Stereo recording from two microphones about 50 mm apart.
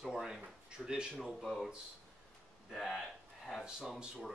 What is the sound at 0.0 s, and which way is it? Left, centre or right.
Speech, centre.